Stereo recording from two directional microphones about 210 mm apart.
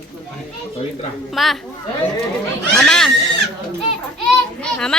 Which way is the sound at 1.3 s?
Centre (ahead or behind).